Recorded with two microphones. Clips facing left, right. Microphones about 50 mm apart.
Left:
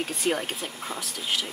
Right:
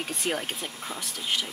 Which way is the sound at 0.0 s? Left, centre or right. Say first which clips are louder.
Left 3 dB; centre.